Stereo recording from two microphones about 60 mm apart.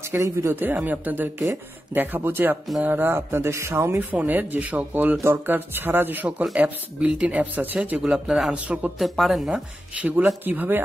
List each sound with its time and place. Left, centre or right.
0.1 s speech: right
0.6 s speech: right
4.1 s speech: right
5.2 s speech: right
6.5 s speech: right
8.0 s speech: centre
8.9 s speech: centre
10.4 s speech: right